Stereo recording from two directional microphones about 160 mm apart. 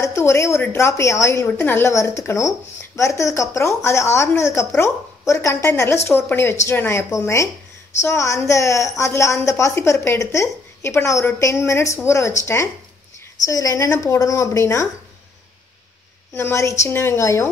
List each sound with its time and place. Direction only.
0.0 s a woman's voice: 15° left (ahead or behind)
16.3 s a woman's voice: 15° left (ahead or behind)